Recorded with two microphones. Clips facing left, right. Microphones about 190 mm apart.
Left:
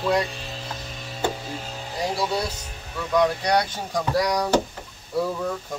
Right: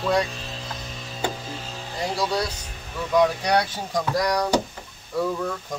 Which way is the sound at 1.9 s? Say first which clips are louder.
Even; 10° left (ahead or behind).